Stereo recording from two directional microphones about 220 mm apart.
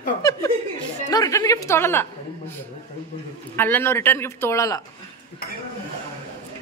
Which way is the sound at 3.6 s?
10° left (ahead or behind).